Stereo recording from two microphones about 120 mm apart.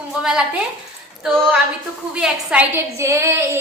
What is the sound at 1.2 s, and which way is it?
Female singing, 10° right (ahead or behind).